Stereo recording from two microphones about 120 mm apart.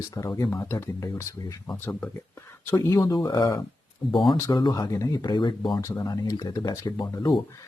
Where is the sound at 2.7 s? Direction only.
20° left (ahead or behind).